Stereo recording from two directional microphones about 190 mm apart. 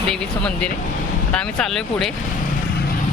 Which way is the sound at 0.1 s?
5° left (ahead or behind).